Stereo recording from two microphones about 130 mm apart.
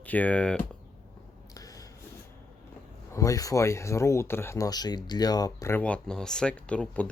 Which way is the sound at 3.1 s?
25° left (ahead or behind).